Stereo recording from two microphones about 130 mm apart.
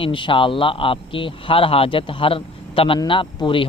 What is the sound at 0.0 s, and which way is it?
Speech, 40° left (ahead or behind).